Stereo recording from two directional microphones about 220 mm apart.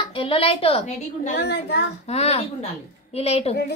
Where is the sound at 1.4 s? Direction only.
50° left (ahead or behind).